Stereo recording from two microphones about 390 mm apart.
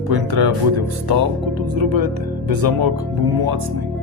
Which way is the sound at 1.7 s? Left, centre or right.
Right.